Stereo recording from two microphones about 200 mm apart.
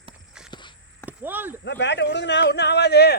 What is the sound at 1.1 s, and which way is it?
Speech, 10° right (ahead or behind).